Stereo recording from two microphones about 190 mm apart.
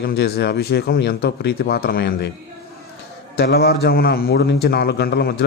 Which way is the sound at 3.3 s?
55° left (ahead or behind).